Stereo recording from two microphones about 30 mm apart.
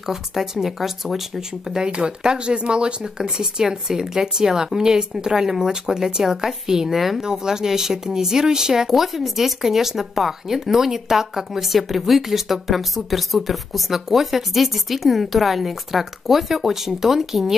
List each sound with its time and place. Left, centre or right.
0.1 s speech: centre
1.8 s speech: right
6.9 s speech: centre
7.2 s speech: right
8.9 s speech: centre